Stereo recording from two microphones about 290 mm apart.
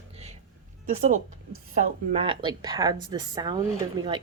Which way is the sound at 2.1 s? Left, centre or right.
Centre.